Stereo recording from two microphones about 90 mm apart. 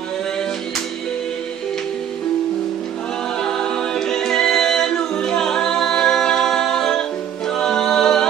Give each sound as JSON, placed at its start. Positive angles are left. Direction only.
{"t": 3.3, "sound": "a capella", "side_deg": 10}